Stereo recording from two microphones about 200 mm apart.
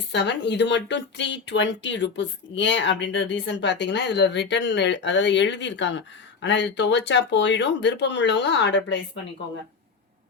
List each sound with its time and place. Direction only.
0.1 s speech: 60° left (ahead or behind)